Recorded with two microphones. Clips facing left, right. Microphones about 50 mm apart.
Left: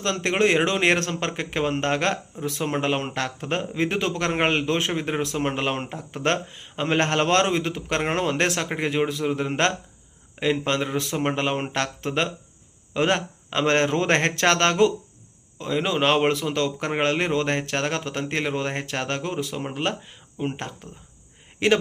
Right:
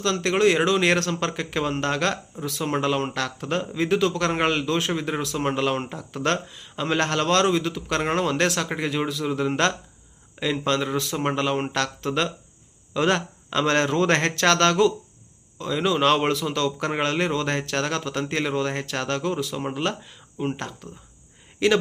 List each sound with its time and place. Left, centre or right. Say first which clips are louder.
0.0 s a man's voice: right 1 dB; left
21.6 s a man's voice: even; left